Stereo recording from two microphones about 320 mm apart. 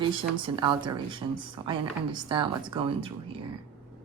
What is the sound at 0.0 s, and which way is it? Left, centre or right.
Speech, centre.